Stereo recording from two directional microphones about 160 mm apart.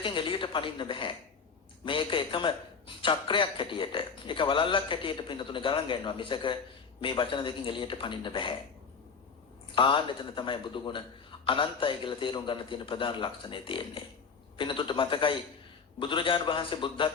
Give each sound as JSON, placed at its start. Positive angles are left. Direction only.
{"t": 0.0, "sound": "a man's voice", "side_deg": 30}
{"t": 9.7, "sound": "a man's voice", "side_deg": 30}